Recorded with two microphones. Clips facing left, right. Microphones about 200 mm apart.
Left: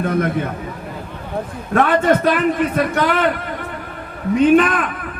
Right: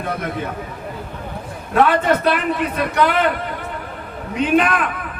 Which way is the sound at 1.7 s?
50° left (ahead or behind).